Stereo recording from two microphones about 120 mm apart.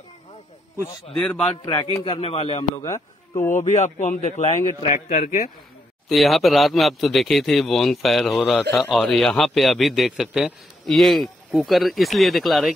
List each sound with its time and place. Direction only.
1.1 s a man's voice: 5° left (ahead or behind)
1.6 s a man's voice: 35° left (ahead or behind); by 2.6 s 60° left (ahead or behind)
2.9 s a man's voice: 90° left
5.2 s a man's voice: 70° left (ahead or behind)
6.0 s a man's voice: centre (ahead or behind)